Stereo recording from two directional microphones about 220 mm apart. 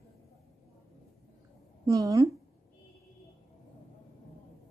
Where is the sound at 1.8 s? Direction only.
15° right (ahead or behind).